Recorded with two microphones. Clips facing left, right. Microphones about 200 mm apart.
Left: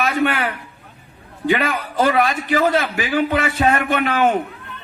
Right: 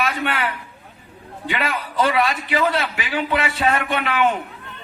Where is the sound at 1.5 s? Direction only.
45° left (ahead or behind).